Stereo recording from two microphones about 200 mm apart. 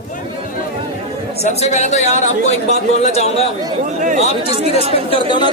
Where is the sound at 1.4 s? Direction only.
35° left (ahead or behind).